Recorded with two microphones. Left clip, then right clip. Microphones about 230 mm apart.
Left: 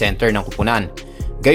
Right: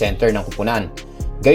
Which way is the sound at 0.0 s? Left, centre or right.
Centre.